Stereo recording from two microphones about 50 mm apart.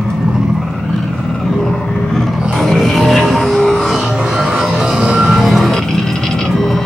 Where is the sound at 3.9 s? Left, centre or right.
Centre.